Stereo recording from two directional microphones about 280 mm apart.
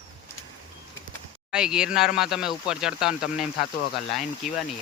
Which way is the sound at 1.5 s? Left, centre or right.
Centre.